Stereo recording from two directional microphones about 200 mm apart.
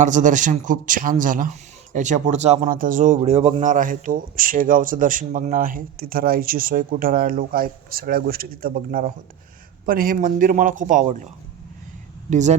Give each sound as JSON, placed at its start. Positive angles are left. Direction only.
{"t": 0.0, "sound": "speech", "side_deg": -40}
{"t": 12.3, "sound": "speech", "side_deg": -35}